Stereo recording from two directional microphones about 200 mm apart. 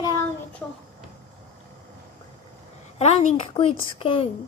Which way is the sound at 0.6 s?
5° left (ahead or behind).